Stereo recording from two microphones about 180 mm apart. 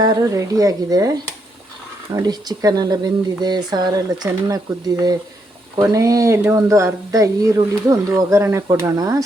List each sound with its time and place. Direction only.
0.0 s speech: 20° right (ahead or behind)
2.1 s speech: 20° right (ahead or behind)
5.7 s speech: 15° right (ahead or behind)